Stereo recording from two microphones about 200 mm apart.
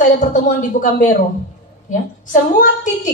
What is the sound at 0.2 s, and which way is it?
Speech, 40° left (ahead or behind).